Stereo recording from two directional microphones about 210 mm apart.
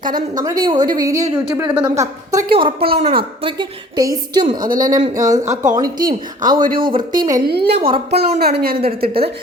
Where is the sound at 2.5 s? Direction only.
25° right (ahead or behind).